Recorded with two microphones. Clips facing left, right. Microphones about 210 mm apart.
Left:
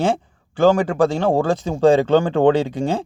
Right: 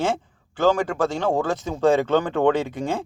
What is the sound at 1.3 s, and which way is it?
Speech, 30° left (ahead or behind).